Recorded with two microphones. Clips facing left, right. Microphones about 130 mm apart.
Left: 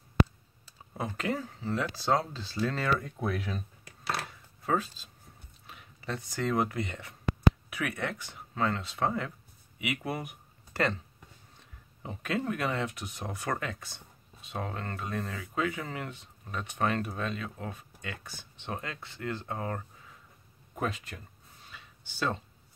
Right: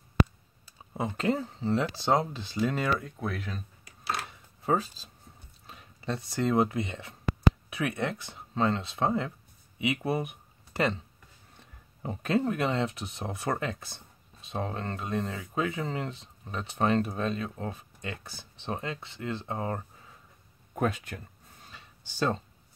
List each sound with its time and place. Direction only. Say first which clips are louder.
0.9 s speech: right 4 dB; 25° right (ahead or behind)
3.0 s speech: left 2 dB; centre (ahead or behind)
4.6 s speech: right 2 dB; 35° right (ahead or behind)
12.0 s speech: right 5 dB; 35° right (ahead or behind)
20.7 s speech: right 4 dB; 55° right (ahead or behind)
21.6 s a sound: even; 35° right (ahead or behind)